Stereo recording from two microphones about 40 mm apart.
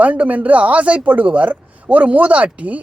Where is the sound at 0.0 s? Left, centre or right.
Right.